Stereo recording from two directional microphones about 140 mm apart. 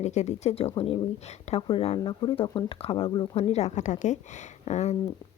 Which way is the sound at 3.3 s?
50° left (ahead or behind).